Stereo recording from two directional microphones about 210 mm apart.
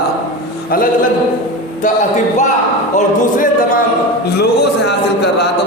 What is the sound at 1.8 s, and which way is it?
Music, 35° left (ahead or behind).